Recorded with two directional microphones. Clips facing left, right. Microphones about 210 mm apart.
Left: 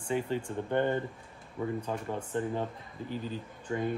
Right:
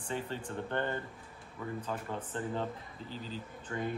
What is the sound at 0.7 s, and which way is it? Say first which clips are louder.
Speech: left 7 dB; 15° left (ahead or behind).